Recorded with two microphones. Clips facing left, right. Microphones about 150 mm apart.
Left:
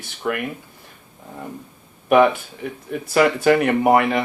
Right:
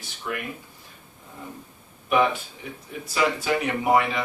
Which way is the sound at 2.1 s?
60° left (ahead or behind).